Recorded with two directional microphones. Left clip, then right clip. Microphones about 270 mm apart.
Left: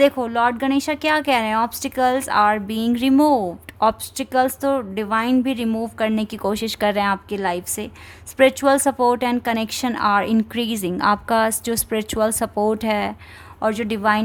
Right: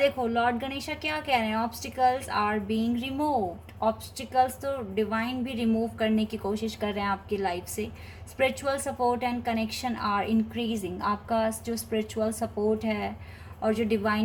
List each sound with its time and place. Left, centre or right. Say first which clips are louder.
0.0 s a woman's voice: left 8 dB; left